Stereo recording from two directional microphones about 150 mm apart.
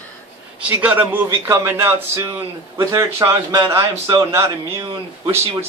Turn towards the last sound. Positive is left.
turn(degrees=-25)  # may be behind; listen again after turning